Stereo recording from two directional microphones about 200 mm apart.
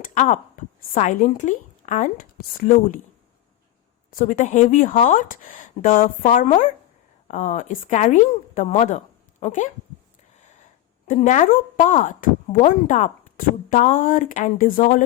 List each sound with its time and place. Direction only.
0.0 s speech: 40° left (ahead or behind)
4.2 s speech: 40° left (ahead or behind)
10.4 s a sound: 40° left (ahead or behind)
11.1 s speech: 40° left (ahead or behind)